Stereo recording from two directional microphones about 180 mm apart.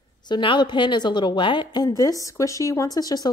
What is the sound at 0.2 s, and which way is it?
A woman's voice, 25° left (ahead or behind).